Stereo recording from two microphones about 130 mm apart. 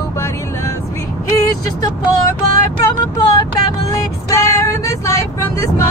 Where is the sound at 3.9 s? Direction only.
25° left (ahead or behind).